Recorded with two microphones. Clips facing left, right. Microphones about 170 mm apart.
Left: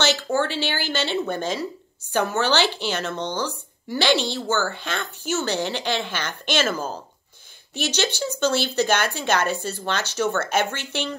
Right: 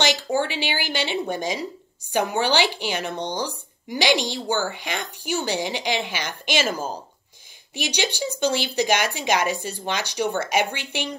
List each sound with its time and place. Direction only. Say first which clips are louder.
0.0 s speech: even; 15° right (ahead or behind)